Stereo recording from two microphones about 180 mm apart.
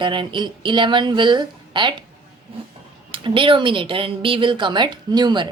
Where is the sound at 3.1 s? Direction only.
30° right (ahead or behind).